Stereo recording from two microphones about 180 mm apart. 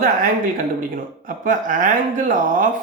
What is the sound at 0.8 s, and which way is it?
Speech, 50° right (ahead or behind).